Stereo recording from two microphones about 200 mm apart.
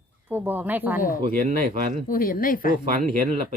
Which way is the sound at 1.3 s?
40° right (ahead or behind).